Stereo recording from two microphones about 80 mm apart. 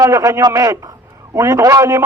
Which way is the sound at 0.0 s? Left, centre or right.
Right.